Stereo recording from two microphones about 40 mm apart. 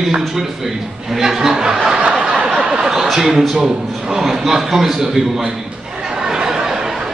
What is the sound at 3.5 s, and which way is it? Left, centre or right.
A man's voice, centre.